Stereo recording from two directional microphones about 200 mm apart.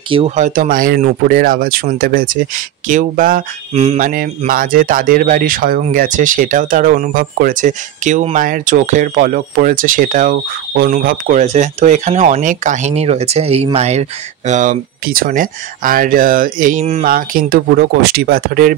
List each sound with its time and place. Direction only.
0.1 s speech: 30° right (ahead or behind)
0.5 s speech: 45° right (ahead or behind)